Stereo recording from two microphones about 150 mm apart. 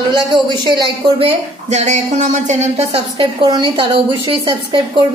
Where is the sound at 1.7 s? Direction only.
50° right (ahead or behind); by 5.0 s 35° right (ahead or behind).